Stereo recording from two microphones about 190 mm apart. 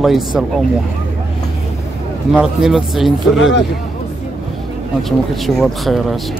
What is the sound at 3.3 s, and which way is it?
Speech, 75° left (ahead or behind).